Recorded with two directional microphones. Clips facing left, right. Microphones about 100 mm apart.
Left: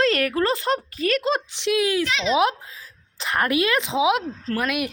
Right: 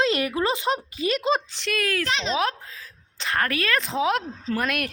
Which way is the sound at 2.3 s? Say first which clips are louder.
Left 5 dB; 15° left (ahead or behind).